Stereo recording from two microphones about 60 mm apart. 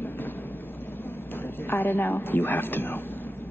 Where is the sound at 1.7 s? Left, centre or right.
Left.